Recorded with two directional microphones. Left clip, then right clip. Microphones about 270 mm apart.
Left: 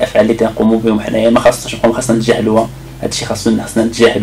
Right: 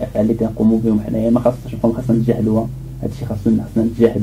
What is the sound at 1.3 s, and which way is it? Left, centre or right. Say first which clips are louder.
Speech: left 7 dB; left.